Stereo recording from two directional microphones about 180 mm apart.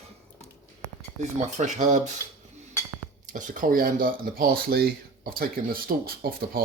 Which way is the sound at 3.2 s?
45° right (ahead or behind).